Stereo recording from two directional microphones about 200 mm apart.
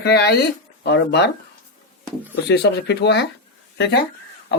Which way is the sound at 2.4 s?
55° left (ahead or behind).